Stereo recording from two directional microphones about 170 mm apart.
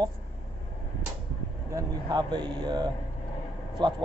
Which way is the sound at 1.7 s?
25° right (ahead or behind).